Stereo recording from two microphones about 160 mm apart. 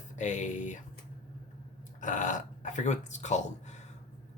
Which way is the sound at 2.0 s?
50° left (ahead or behind).